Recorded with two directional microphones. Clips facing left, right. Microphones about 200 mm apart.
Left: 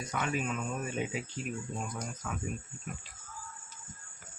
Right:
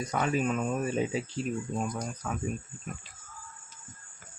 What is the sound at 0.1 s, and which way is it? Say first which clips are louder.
Speech: right 5 dB; 40° right (ahead or behind).